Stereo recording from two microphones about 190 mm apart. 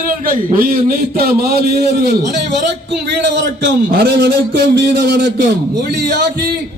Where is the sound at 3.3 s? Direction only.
65° right (ahead or behind).